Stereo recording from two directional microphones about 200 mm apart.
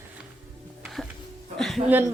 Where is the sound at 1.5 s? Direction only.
Centre (ahead or behind).